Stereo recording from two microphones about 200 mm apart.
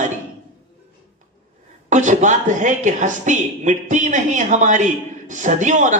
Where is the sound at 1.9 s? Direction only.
40° right (ahead or behind).